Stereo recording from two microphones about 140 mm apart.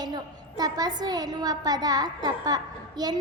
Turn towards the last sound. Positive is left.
turn(degrees=-30)  # may be behind; listen again after turning